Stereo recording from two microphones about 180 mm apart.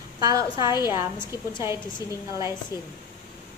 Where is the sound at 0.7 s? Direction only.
20° left (ahead or behind).